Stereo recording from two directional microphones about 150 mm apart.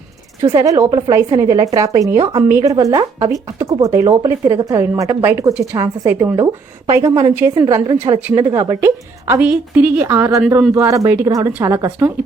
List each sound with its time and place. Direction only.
0.4 s a woman's voice: 20° right (ahead or behind)